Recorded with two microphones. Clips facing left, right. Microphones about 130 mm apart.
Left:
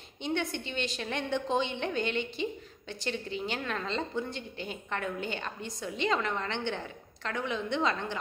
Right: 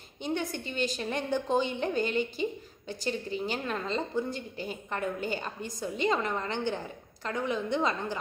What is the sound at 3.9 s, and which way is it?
A woman's voice, centre (ahead or behind).